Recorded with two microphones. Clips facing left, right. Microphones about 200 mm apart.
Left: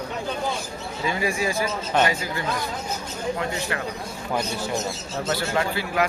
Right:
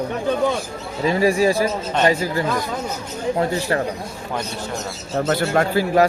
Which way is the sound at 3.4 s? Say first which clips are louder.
Right 7 dB; 35° right (ahead or behind).